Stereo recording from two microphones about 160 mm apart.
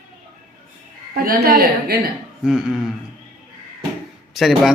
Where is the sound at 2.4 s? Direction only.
5° right (ahead or behind).